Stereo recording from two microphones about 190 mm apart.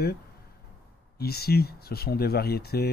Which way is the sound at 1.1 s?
55° left (ahead or behind).